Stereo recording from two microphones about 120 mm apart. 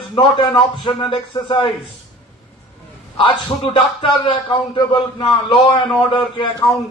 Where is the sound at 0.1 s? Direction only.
45° left (ahead or behind).